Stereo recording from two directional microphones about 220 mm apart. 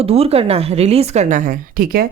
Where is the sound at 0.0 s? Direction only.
25° right (ahead or behind).